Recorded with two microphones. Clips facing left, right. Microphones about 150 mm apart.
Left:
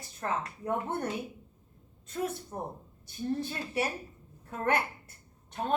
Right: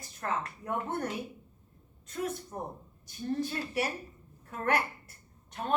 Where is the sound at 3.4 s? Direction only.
25° left (ahead or behind).